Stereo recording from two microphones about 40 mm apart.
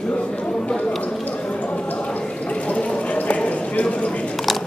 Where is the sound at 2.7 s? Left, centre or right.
Left.